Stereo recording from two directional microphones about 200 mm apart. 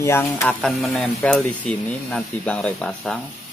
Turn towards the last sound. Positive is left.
turn(degrees=5)  # may be behind; listen again after turning